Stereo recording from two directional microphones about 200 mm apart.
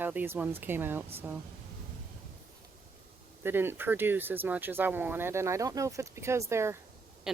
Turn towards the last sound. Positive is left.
turn(degrees=-15)  # may be behind; listen again after turning